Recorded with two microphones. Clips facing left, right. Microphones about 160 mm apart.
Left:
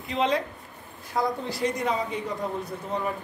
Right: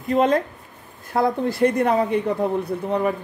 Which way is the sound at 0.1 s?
50° right (ahead or behind).